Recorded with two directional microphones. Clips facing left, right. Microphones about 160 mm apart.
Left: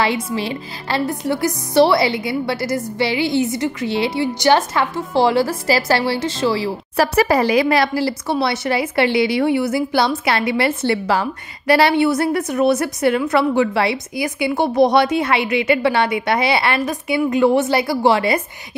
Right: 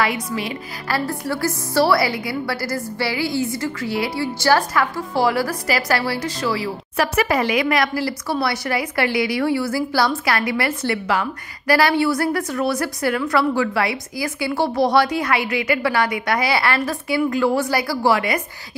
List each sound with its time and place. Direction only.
0.0 s a woman's voice: 30° left (ahead or behind)